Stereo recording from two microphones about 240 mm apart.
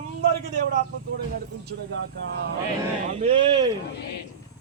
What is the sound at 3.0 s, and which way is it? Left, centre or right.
Speech, right.